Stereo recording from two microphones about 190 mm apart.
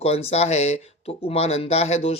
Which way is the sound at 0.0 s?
30° left (ahead or behind).